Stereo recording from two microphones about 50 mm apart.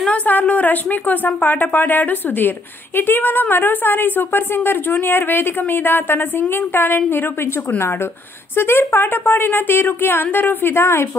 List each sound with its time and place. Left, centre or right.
0.0 s a woman's voice: left
8.5 s a woman's voice: left